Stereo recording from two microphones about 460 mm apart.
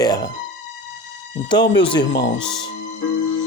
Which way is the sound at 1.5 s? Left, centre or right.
Centre.